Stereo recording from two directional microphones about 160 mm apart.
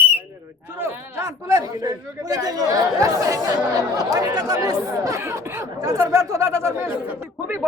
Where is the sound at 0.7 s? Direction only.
15° right (ahead or behind).